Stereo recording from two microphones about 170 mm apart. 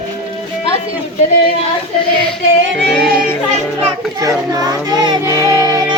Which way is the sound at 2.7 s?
Centre (ahead or behind).